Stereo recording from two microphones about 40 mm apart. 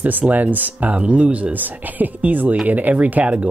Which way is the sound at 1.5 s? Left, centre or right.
Right.